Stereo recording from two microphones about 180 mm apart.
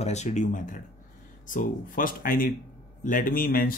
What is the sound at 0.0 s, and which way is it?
Speech, 40° left (ahead or behind).